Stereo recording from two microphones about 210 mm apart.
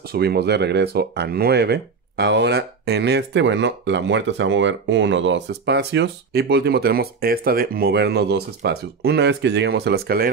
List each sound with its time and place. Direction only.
0.1 s speech: 50° right (ahead or behind)